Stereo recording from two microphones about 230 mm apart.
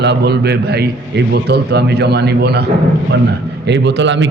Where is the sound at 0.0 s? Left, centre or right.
Right.